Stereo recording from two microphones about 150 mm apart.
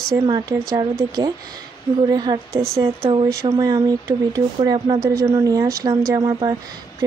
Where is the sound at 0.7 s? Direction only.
25° right (ahead or behind).